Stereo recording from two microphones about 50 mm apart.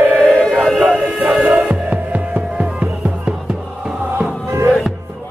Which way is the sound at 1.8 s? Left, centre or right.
Right.